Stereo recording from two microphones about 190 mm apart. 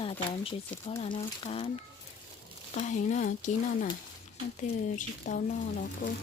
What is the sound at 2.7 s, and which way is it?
Speech, 40° left (ahead or behind).